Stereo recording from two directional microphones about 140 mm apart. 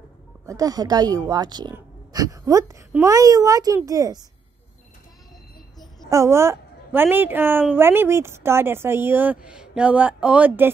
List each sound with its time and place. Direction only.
0.5 s a child's voice: 25° right (ahead or behind)
6.0 s a woman's voice: 20° right (ahead or behind)